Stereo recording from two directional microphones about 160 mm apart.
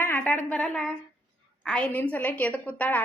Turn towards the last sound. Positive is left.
turn(degrees=10)  # may be behind; listen again after turning